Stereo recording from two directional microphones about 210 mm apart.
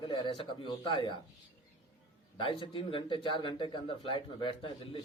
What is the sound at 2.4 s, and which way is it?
A man's voice, 25° left (ahead or behind).